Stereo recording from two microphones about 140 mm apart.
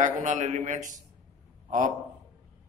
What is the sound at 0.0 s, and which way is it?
Speech, 60° right (ahead or behind).